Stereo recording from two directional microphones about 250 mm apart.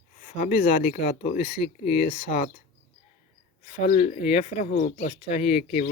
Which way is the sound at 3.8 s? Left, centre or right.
Left.